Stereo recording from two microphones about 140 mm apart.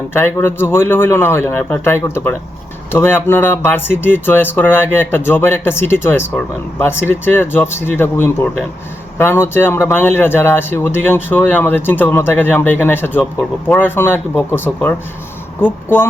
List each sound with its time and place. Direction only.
0.1 s speech: 15° left (ahead or behind)